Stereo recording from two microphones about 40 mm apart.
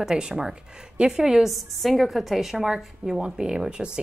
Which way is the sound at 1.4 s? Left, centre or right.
Centre.